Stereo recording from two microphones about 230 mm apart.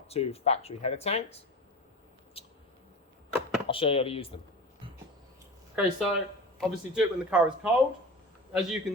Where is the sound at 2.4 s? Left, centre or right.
Left.